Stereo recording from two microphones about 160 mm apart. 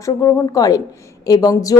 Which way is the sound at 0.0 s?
20° left (ahead or behind).